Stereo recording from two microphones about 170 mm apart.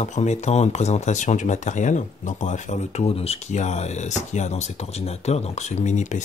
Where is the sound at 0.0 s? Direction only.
40° left (ahead or behind).